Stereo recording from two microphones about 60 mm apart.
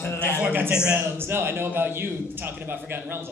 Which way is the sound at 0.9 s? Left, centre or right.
Right.